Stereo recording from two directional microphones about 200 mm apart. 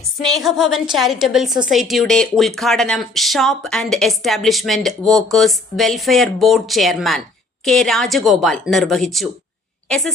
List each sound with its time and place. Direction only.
0.2 s speech: centre (ahead or behind)